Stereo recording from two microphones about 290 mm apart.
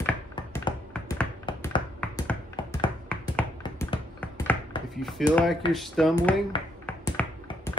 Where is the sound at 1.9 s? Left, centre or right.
Centre.